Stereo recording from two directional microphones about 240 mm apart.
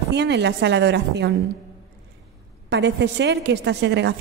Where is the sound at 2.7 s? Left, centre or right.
Right.